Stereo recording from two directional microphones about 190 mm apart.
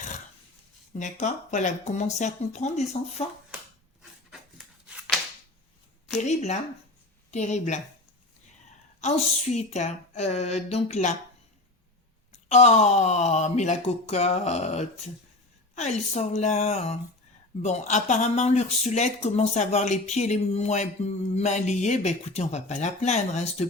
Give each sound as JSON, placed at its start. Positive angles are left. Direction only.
{"t": 0.9, "sound": "speech", "side_deg": 40}
{"t": 4.3, "sound": "a sound", "side_deg": -5}
{"t": 6.1, "sound": "speech", "side_deg": 35}
{"t": 9.0, "sound": "speech", "side_deg": 35}
{"t": 12.3, "sound": "speech", "side_deg": 35}